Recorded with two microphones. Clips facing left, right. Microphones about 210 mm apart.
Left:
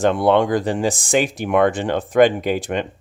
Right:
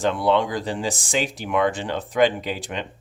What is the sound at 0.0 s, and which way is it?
Speech, 55° left (ahead or behind).